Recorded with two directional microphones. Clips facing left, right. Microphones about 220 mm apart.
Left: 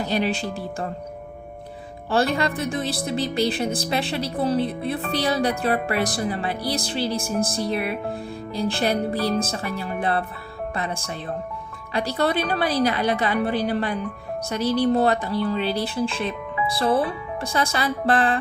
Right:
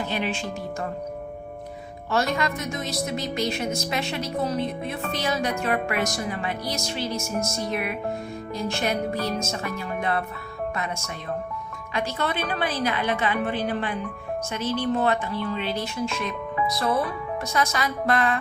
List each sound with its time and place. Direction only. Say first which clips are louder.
0.0 s speech: left 4 dB; 40° left (ahead or behind)
2.0 s speech: left 3 dB; 30° left (ahead or behind)